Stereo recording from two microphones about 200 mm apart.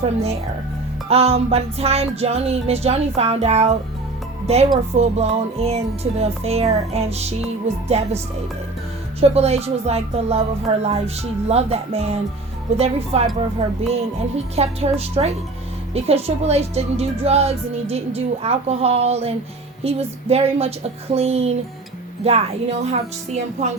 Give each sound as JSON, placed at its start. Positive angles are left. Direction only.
{"t": 0.0, "sound": "a woman's voice", "side_deg": -30}
{"t": 9.2, "sound": "a woman's voice", "side_deg": -30}
{"t": 14.5, "sound": "a woman's voice", "side_deg": -30}